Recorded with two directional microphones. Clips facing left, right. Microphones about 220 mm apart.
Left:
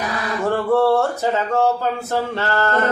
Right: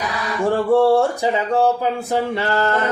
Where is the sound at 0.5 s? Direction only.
15° right (ahead or behind).